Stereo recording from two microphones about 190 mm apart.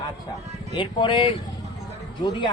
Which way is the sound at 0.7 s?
25° left (ahead or behind).